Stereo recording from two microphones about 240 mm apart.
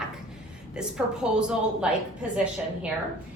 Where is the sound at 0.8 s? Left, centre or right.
Centre.